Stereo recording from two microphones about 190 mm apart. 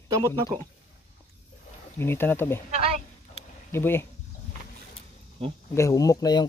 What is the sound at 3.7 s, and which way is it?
Speech, 10° left (ahead or behind).